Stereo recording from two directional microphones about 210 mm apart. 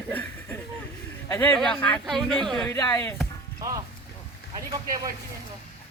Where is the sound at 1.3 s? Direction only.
10° left (ahead or behind).